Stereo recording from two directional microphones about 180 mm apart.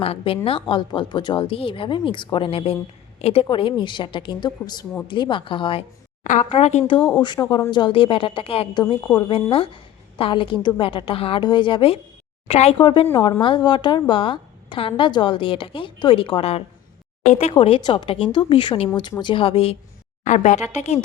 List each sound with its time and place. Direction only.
0.0 s a woman's voice: 30° left (ahead or behind)
6.2 s a woman's voice: 40° left (ahead or behind)
20.2 s speech: 40° left (ahead or behind)